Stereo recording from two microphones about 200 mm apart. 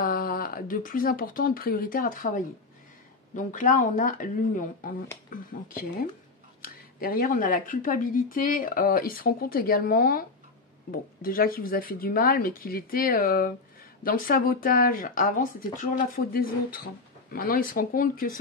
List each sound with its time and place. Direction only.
0.0 s speech: 45° left (ahead or behind)